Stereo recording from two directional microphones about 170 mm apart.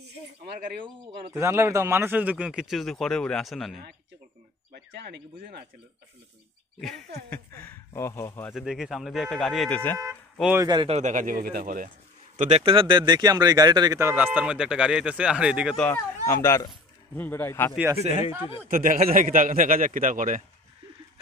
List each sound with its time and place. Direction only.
0.8 s speech: 30° right (ahead or behind)
1.3 s a man's voice: 15° right (ahead or behind); by 3.8 s centre (ahead or behind)
5.0 s speech: 70° right (ahead or behind)
6.8 s a man's voice: centre (ahead or behind)
8.5 s a man's voice: centre (ahead or behind)
10.6 s a man's voice: 25° right (ahead or behind)
11.0 s a man's voice: 45° right (ahead or behind)
12.4 s speech: 40° right (ahead or behind); by 15.8 s 5° right (ahead or behind)
15.8 s speech: 10° left (ahead or behind)
18.7 s a man's voice: 50° right (ahead or behind)